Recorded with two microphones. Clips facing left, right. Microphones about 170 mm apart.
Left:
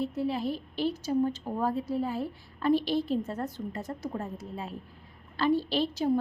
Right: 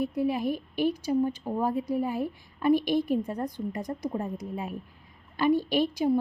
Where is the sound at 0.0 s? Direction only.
15° right (ahead or behind).